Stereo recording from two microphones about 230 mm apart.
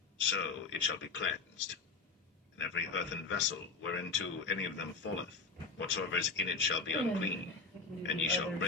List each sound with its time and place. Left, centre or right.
0.2 s speech: left